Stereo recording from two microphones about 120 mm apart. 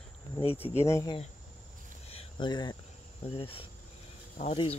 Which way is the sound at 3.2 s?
50° left (ahead or behind).